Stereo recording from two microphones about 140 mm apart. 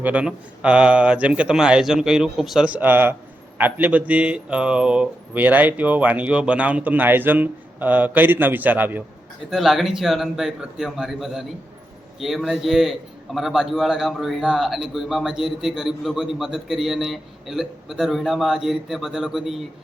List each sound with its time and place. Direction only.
0.0 s speech: 10° right (ahead or behind)
9.5 s a man's voice: centre (ahead or behind)